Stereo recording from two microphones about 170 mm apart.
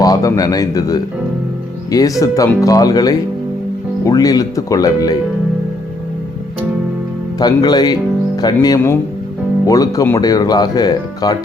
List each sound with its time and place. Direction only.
0.0 s speech: 20° left (ahead or behind)
7.3 s speech: 25° left (ahead or behind)